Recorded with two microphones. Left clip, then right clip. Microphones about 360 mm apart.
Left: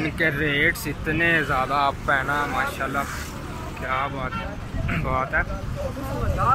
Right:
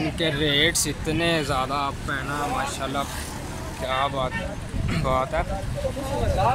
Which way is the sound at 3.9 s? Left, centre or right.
Centre.